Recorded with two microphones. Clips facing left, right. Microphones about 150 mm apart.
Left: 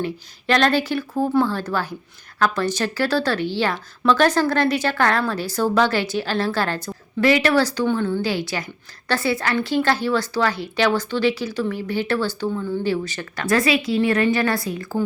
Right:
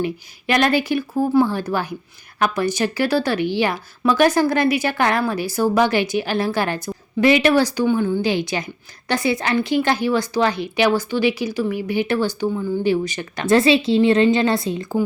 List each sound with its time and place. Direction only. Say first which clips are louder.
0.0 s a woman's voice: right 2 dB; 15° right (ahead or behind)